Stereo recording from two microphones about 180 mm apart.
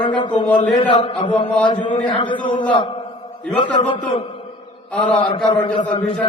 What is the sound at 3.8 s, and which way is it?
Speech, 25° left (ahead or behind).